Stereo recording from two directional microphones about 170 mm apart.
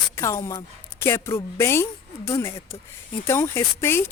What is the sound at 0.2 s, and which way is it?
A woman's voice, 15° left (ahead or behind).